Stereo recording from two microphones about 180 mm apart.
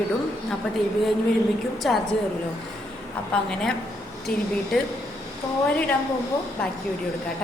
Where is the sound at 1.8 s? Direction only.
Centre (ahead or behind).